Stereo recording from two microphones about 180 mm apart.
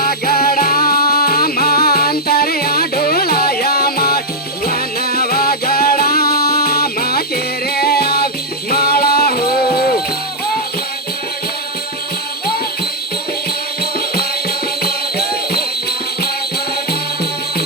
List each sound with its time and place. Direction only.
0.0 s music: 55° left (ahead or behind)
14.8 s music: 60° left (ahead or behind)